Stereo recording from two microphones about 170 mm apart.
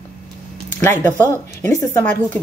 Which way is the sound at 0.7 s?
15° left (ahead or behind).